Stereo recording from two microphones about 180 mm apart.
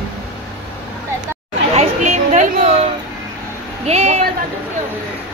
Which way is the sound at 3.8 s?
35° right (ahead or behind).